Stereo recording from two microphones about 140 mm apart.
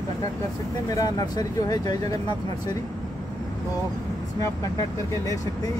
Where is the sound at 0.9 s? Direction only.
25° left (ahead or behind).